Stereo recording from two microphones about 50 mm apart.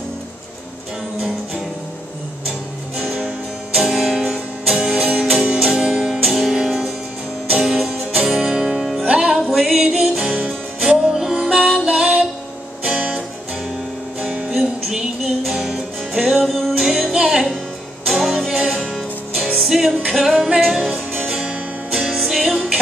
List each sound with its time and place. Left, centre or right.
3.0 s music: centre
9.0 s music: centre
9.4 s music: centre
14.5 s music: centre
21.3 s music: centre